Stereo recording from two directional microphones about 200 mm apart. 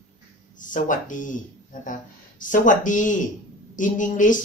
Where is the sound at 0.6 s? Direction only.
40° left (ahead or behind).